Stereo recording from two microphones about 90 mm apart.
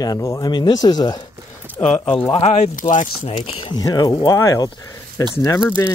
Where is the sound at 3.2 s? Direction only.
90° left.